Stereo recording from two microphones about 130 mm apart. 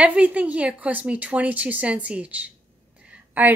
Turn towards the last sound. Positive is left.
turn(degrees=-10)  # may be behind; listen again after turning